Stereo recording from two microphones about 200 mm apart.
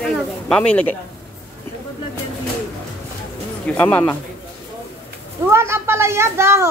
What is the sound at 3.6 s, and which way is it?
Speech, 5° left (ahead or behind).